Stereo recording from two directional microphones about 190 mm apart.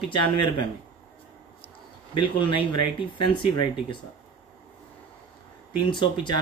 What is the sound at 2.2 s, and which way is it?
Speech, 25° left (ahead or behind).